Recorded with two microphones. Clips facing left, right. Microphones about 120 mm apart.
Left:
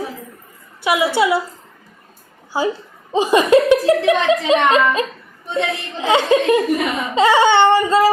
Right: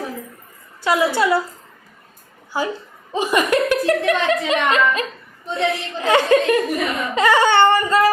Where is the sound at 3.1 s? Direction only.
25° left (ahead or behind).